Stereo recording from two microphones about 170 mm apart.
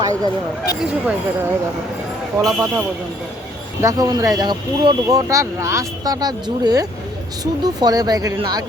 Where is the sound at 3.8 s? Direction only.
20° right (ahead or behind).